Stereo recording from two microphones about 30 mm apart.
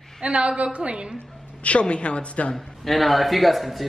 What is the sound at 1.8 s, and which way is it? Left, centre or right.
Speech, left.